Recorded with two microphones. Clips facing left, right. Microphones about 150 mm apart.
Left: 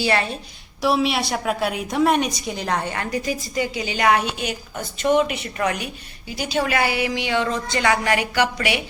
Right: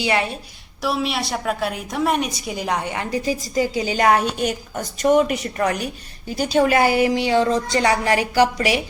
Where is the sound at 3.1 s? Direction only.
30° right (ahead or behind).